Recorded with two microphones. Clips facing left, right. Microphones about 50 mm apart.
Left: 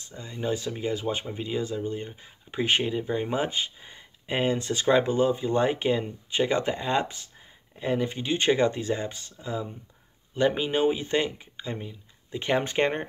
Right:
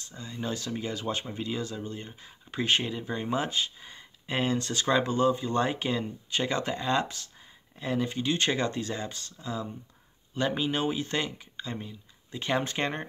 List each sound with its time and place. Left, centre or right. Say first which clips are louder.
0.0 s speech: left 4 dB; left